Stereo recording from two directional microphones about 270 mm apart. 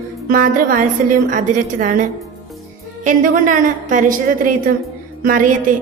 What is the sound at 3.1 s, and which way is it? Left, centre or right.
A woman's voice, right.